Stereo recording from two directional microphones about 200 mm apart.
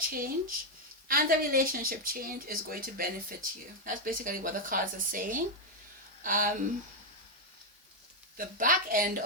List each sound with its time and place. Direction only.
0.1 s speech: 45° right (ahead or behind)
8.4 s speech: 45° right (ahead or behind)